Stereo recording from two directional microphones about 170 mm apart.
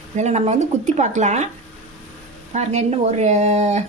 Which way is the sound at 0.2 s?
40° right (ahead or behind).